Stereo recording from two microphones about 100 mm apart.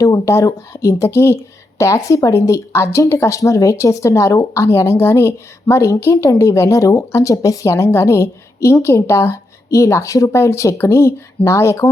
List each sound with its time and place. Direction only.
0.0 s speech: 30° left (ahead or behind)